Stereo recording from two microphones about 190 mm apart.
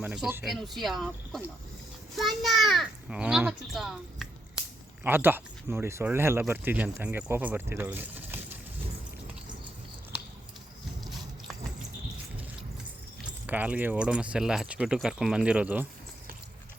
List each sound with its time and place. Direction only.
0.0 s speech: 5° right (ahead or behind)
11.0 s a sound: centre (ahead or behind)
13.2 s speech: 10° right (ahead or behind)